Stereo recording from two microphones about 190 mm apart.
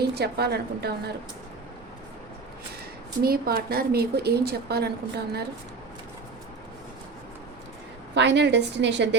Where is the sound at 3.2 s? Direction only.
50° right (ahead or behind).